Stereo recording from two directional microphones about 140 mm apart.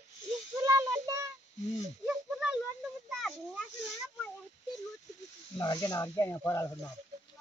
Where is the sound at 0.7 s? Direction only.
25° right (ahead or behind).